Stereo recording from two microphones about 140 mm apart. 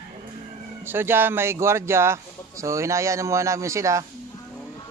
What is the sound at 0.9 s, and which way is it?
Mantra, 15° right (ahead or behind).